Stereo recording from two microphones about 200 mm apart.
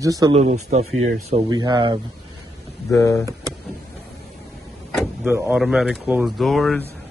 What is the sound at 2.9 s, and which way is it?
Speech, 15° left (ahead or behind).